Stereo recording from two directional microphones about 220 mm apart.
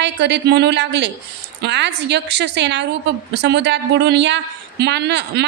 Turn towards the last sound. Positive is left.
turn(degrees=-50)  # may be behind; listen again after turning